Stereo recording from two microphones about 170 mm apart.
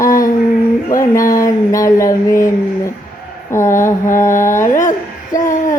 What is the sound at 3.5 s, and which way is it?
Mantra, 15° left (ahead or behind).